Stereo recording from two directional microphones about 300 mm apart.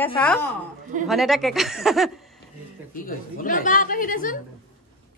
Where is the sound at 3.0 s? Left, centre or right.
Left.